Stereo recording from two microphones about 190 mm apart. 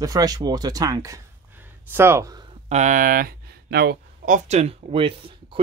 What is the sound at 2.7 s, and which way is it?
Speech, 40° right (ahead or behind).